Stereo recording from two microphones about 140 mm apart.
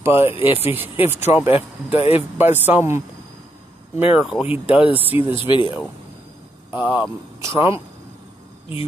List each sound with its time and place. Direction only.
0.0 s speech: 15° right (ahead or behind)
0.5 s speech: 40° left (ahead or behind)
0.7 s speech: 15° right (ahead or behind)
2.0 s speech: 45° left (ahead or behind)
2.3 s speech: 15° right (ahead or behind)
4.0 s speech: 15° right (ahead or behind)
5.1 s speech: 40° left (ahead or behind)
6.7 s speech: 10° right (ahead or behind)